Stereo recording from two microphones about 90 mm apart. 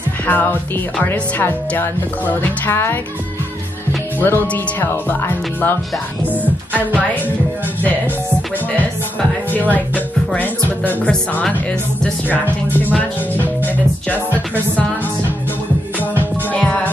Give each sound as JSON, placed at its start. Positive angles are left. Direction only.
{"t": 0.3, "sound": "speech", "side_deg": 20}
{"t": 4.2, "sound": "speech", "side_deg": 20}
{"t": 9.7, "sound": "speech", "side_deg": 20}
{"t": 14.0, "sound": "speech", "side_deg": 20}
{"t": 16.0, "sound": "music", "side_deg": 15}